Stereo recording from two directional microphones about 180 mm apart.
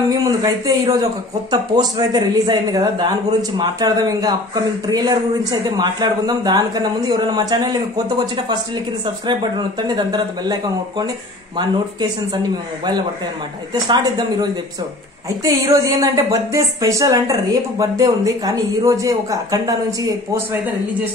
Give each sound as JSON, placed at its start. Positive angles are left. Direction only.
{"t": 0.1, "sound": "speech", "side_deg": -20}
{"t": 9.0, "sound": "speech", "side_deg": -25}
{"t": 13.8, "sound": "speech", "side_deg": -25}